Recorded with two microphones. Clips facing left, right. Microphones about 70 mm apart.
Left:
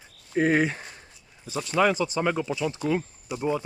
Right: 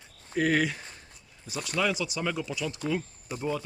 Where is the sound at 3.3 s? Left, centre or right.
Right.